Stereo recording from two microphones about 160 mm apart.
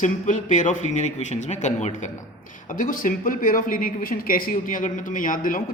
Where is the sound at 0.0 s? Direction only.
50° left (ahead or behind).